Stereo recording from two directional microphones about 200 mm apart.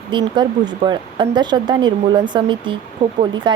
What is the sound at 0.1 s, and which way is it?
A woman's voice, 20° right (ahead or behind).